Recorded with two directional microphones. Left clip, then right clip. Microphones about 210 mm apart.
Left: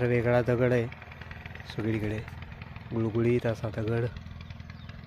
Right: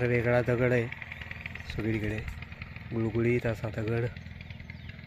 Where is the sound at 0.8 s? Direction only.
40° left (ahead or behind).